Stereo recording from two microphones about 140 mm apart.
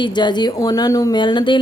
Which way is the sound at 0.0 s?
30° left (ahead or behind).